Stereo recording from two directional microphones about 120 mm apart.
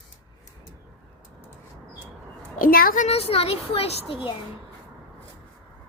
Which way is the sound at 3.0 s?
60° left (ahead or behind).